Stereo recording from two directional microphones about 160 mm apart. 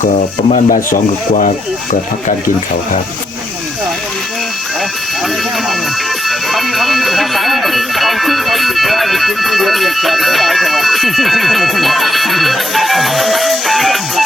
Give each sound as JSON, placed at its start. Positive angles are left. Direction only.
{"t": 0.0, "sound": "speech", "side_deg": 45}
{"t": 6.2, "sound": "speech", "side_deg": 0}